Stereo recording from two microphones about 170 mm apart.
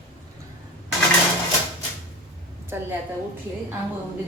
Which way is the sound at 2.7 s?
15° right (ahead or behind).